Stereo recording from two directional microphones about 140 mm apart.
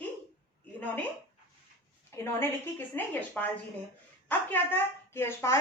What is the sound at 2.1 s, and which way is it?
A woman's voice, 20° left (ahead or behind).